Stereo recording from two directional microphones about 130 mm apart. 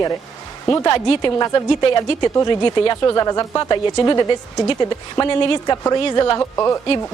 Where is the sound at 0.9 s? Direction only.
40° left (ahead or behind).